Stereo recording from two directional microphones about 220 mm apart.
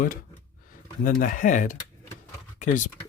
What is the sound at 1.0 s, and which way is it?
Speech, 35° left (ahead or behind).